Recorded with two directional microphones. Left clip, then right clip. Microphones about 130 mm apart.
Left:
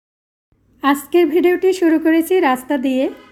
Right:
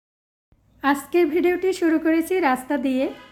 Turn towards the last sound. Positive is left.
turn(degrees=25)  # may be behind; listen again after turning